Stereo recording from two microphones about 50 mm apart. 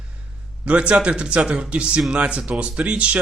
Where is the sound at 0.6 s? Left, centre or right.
Right.